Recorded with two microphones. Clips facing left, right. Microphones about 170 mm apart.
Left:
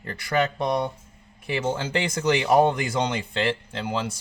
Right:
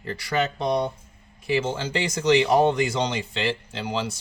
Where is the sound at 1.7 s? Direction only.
55° left (ahead or behind).